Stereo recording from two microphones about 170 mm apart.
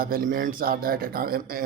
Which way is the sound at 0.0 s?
60° right (ahead or behind).